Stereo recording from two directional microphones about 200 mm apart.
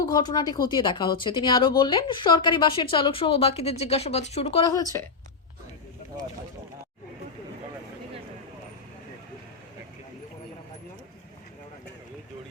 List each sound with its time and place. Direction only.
0.0 s speech: 20° left (ahead or behind)
4.7 s a woman's voice: 15° left (ahead or behind)